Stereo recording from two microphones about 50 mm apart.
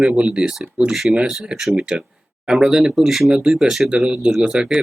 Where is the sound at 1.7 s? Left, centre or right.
Centre.